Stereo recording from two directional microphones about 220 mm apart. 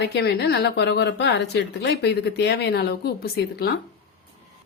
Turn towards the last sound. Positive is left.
turn(degrees=45)  # may be behind; listen again after turning